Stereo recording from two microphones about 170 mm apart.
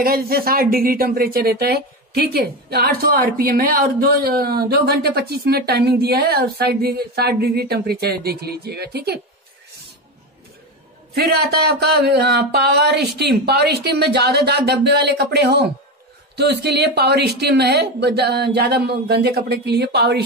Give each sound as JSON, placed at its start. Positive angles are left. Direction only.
{"t": 0.0, "sound": "speech", "side_deg": -60}
{"t": 11.1, "sound": "speech", "side_deg": -65}